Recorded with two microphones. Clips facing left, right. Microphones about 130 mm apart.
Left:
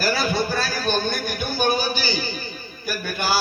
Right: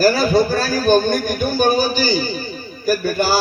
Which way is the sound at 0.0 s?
40° right (ahead or behind).